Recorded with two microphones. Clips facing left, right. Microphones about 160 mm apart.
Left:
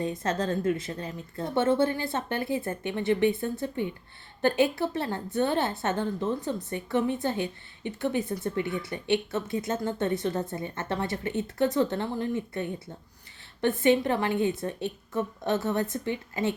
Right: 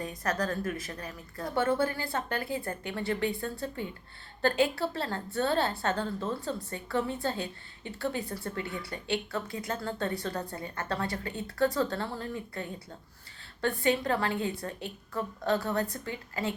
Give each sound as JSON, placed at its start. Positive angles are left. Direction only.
{"t": 0.0, "sound": "a woman's voice", "side_deg": 25}